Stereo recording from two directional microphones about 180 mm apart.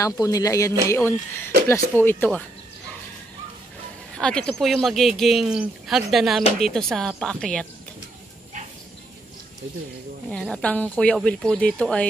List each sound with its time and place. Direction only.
0.0 s speech: 20° left (ahead or behind)
4.2 s speech: 5° left (ahead or behind)
10.3 s speech: 5° left (ahead or behind)